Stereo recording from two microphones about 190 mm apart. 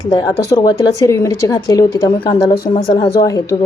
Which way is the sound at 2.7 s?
30° left (ahead or behind).